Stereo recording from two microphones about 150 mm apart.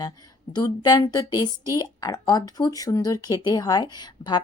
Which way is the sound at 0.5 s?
25° left (ahead or behind).